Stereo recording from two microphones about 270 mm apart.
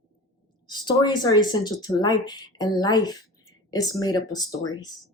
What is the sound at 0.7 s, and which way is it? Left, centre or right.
Speech, centre.